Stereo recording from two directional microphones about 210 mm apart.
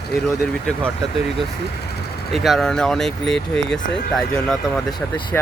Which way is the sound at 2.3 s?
Centre (ahead or behind).